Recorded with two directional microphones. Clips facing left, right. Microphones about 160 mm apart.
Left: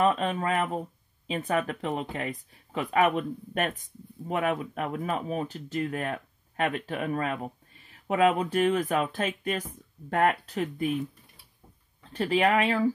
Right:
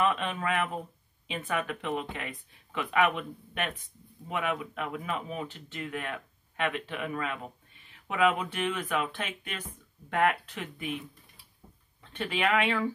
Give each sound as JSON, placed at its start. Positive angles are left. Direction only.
{"t": 0.0, "sound": "speech", "side_deg": 35}
{"t": 12.1, "sound": "speech", "side_deg": 35}